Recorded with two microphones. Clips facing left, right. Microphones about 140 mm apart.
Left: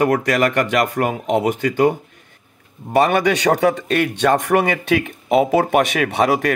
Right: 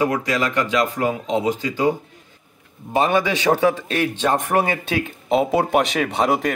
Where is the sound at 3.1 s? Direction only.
65° left (ahead or behind).